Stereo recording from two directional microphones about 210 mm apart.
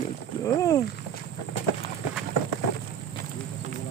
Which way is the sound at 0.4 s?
15° left (ahead or behind).